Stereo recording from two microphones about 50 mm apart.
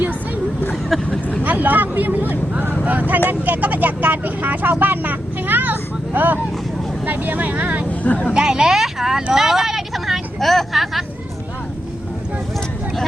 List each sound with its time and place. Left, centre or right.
0.9 s speech: centre
1.5 s speech: right
8.0 s speech: left
8.3 s speech: centre